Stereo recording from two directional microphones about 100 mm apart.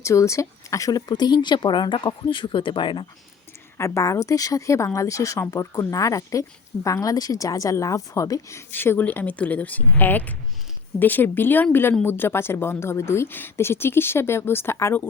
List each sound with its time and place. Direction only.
0.0 s a woman's voice: 30° left (ahead or behind); by 3.1 s 55° left (ahead or behind)
3.8 s a woman's voice: 30° left (ahead or behind)